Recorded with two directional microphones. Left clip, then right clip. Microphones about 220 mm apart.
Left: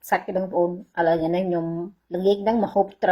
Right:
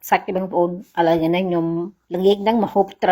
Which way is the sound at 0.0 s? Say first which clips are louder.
Right 4 dB; 25° right (ahead or behind).